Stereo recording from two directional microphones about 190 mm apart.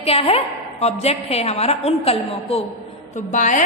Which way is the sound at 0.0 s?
30° left (ahead or behind).